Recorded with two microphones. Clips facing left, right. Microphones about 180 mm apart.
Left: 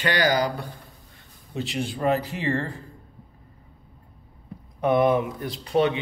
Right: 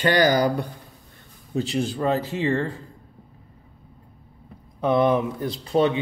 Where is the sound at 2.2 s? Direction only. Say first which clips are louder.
Right 3 dB; 25° right (ahead or behind).